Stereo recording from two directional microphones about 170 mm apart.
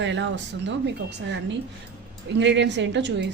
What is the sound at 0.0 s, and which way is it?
Speech, 90° right.